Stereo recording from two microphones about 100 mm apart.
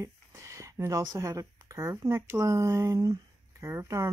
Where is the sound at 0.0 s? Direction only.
30° right (ahead or behind).